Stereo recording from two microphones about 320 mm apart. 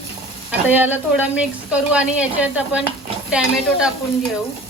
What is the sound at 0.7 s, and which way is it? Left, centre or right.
A woman's voice, centre.